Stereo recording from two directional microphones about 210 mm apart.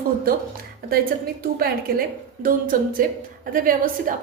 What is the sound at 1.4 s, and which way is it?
A woman's voice, 45° right (ahead or behind).